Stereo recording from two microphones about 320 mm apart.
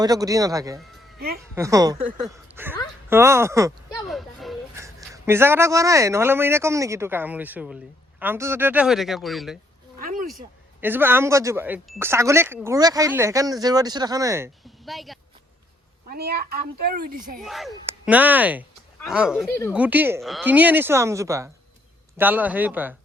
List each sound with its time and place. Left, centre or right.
0.0 s a man's voice: centre
10.0 s a sound: right
10.2 s speech: centre
16.0 s speech: right
17.4 s speech: centre
19.7 s speech: centre